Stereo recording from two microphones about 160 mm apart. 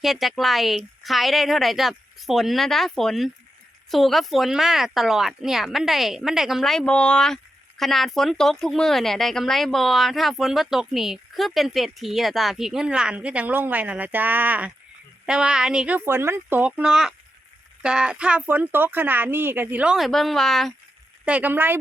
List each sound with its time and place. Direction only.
0.0 s speech: centre (ahead or behind)
21.2 s speech: 10° right (ahead or behind)